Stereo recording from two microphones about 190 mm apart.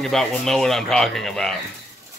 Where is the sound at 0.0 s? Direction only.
Centre (ahead or behind).